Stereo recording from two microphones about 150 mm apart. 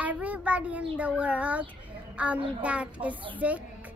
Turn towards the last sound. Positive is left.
turn(degrees=-10)  # may be behind; listen again after turning